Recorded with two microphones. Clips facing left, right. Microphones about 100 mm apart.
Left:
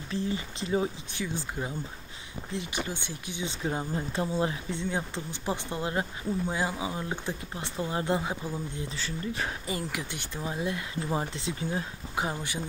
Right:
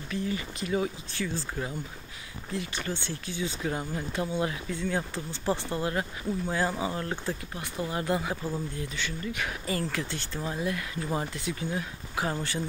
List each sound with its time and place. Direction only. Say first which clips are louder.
0.1 s speech: even; 25° left (ahead or behind)
7.5 s speech: left 3 dB; 25° left (ahead or behind)
9.7 s speech: right 3 dB; 15° left (ahead or behind)